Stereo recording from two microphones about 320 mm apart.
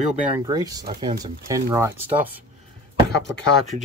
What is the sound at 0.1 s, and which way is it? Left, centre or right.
Speech, centre.